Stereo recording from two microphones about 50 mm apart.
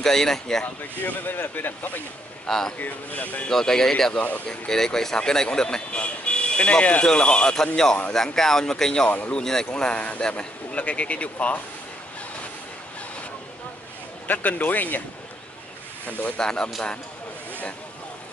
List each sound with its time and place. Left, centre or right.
0.0 s speech: centre
1.0 s speech: left
2.4 s a man's voice: centre
2.8 s speech: left
3.4 s speech: centre
4.1 s speech: left
4.5 s speech: centre
9.7 s speech: left
14.2 s speech: left
16.1 s speech: left
16.3 s speech: centre